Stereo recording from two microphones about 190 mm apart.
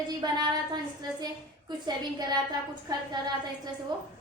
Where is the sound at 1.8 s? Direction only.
20° right (ahead or behind).